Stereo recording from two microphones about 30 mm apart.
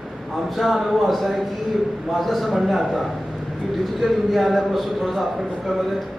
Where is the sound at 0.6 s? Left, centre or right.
Centre.